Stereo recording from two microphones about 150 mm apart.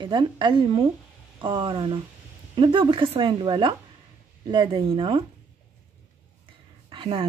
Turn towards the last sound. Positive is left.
turn(degrees=-35)  # may be behind; listen again after turning